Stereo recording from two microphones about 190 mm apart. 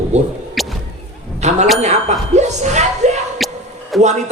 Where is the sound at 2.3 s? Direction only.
35° right (ahead or behind).